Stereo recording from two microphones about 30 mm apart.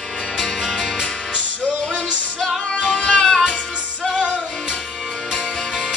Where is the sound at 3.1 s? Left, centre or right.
Left.